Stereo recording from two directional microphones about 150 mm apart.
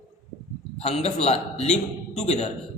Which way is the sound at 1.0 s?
45° left (ahead or behind).